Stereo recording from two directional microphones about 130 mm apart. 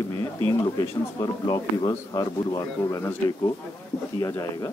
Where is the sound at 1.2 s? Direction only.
30° left (ahead or behind).